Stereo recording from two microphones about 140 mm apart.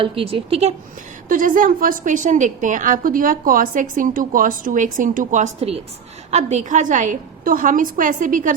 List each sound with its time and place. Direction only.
0.0 s speech: 40° right (ahead or behind)
1.3 s a woman's voice: 75° right (ahead or behind)